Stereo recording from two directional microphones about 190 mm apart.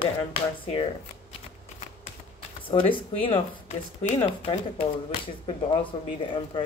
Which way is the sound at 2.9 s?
25° left (ahead or behind).